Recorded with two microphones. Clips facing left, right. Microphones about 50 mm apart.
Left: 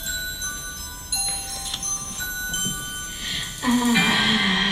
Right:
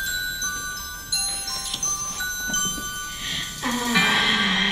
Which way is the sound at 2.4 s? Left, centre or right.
Centre.